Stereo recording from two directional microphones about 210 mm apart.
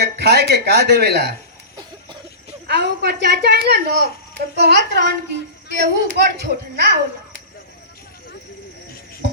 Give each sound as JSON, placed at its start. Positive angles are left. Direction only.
{"t": 0.0, "sound": "a child's voice", "side_deg": -50}
{"t": 2.6, "sound": "a child's voice", "side_deg": -50}